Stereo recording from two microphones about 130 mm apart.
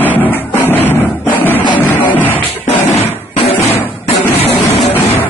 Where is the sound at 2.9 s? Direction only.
50° left (ahead or behind).